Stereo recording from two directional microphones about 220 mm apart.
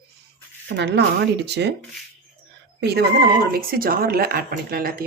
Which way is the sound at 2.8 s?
45° right (ahead or behind).